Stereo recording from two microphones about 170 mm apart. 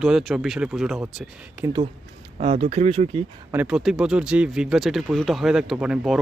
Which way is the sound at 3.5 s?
5° right (ahead or behind).